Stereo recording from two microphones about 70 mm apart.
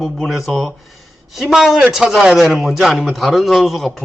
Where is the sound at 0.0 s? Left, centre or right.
Centre.